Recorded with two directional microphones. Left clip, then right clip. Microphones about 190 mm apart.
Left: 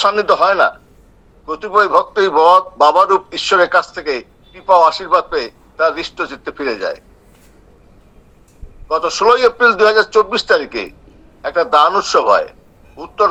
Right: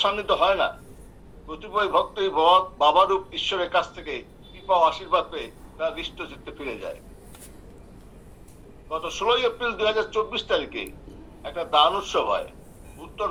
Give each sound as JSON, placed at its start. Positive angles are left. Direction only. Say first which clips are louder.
{"t": 0.0, "sound": "a man's voice", "louder": "left 9 dB", "side_deg": 65}
{"t": 8.9, "sound": "a man's voice", "louder": "left 12 dB", "side_deg": 65}